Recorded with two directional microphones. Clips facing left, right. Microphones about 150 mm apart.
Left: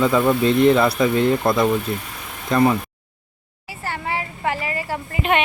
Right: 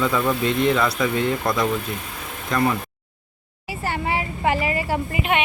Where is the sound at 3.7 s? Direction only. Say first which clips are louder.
Right 2 dB; 15° right (ahead or behind).